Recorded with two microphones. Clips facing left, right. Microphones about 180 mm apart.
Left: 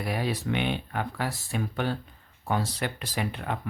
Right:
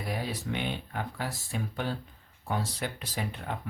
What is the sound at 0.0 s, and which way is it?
Speech, 70° left (ahead or behind).